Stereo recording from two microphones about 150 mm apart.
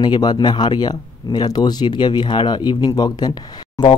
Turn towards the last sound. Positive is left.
turn(degrees=30)  # may be behind; listen again after turning